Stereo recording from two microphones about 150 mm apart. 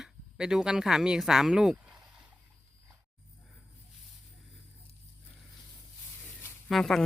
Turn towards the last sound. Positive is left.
turn(degrees=0)  # may be behind; listen again after turning